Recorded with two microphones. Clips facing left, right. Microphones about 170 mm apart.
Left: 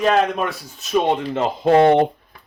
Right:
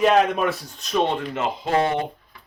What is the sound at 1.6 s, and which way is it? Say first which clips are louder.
Speech: left 10 dB; 60° left (ahead or behind).